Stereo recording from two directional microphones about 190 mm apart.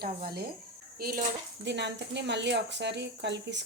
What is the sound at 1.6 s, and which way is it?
Speech, 65° right (ahead or behind).